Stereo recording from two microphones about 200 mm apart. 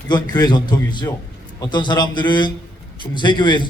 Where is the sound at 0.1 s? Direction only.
20° left (ahead or behind).